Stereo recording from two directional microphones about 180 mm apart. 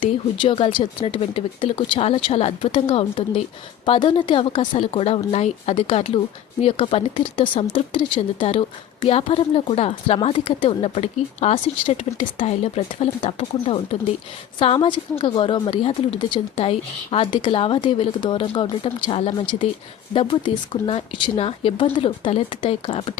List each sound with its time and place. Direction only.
0.0 s speech: 30° left (ahead or behind)